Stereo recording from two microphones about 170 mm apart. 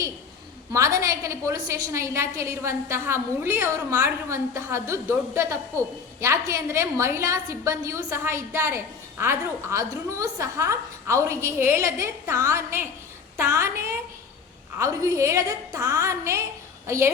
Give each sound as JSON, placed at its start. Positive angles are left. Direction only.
{"t": 0.7, "sound": "a woman's voice", "side_deg": -20}